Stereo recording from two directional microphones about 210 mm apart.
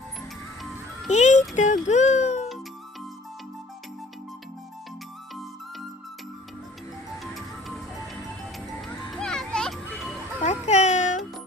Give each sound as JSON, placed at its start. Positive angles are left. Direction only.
{"t": 1.0, "sound": "music", "side_deg": 35}
{"t": 9.0, "sound": "children playing", "side_deg": 5}
{"t": 10.4, "sound": "a sound", "side_deg": 30}